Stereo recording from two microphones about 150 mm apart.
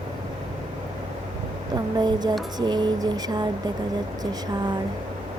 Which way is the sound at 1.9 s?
25° right (ahead or behind).